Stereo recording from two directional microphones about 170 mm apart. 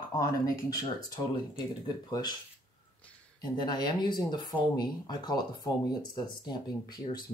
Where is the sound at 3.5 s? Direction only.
25° left (ahead or behind).